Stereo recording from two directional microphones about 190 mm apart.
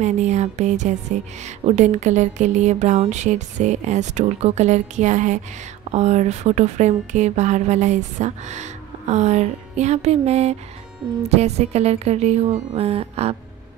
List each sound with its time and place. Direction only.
0.0 s speech: 35° right (ahead or behind)